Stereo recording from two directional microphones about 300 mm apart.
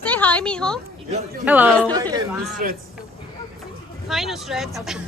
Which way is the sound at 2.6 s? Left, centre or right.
Right.